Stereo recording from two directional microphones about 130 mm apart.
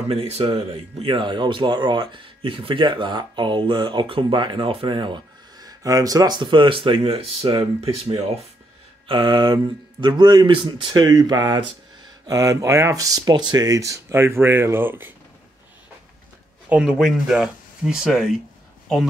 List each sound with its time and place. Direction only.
0.1 s speech: 50° right (ahead or behind); by 15.1 s 15° right (ahead or behind)
16.6 s speech: 10° right (ahead or behind)